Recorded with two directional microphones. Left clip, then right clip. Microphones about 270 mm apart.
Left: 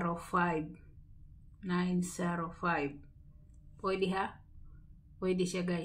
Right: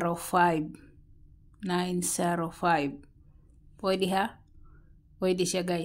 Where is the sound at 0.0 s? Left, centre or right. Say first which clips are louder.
Right 8 dB; right.